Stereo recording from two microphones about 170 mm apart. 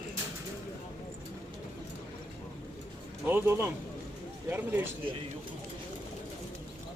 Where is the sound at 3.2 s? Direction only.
15° right (ahead or behind).